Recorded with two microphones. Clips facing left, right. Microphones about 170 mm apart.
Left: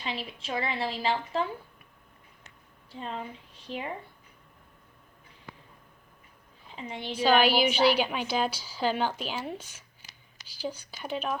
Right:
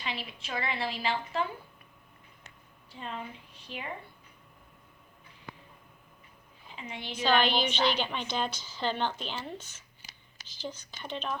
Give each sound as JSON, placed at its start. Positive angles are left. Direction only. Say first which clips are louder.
{"t": 0.0, "sound": "a woman's voice", "louder": "left 3 dB", "side_deg": 30}
{"t": 3.0, "sound": "a woman's voice", "louder": "left 3 dB", "side_deg": 35}
{"t": 6.7, "sound": "a woman's voice", "louder": "left 4 dB", "side_deg": 35}
{"t": 7.2, "sound": "a woman's voice", "louder": "left 4 dB", "side_deg": 10}